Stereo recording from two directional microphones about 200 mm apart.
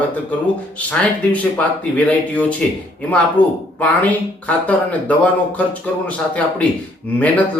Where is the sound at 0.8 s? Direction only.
5° left (ahead or behind).